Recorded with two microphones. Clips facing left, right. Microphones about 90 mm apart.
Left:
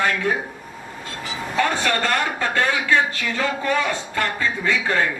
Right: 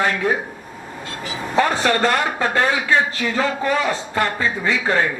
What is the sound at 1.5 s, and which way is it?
A man's voice, 30° right (ahead or behind).